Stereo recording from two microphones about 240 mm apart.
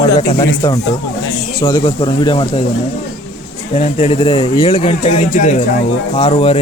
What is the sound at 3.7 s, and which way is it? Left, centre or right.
Speech, left.